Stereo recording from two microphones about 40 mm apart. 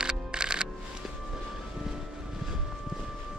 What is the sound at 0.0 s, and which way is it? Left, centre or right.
Music, right.